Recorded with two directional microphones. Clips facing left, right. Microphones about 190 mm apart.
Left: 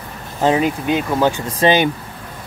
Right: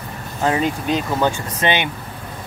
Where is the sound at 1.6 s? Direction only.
35° left (ahead or behind).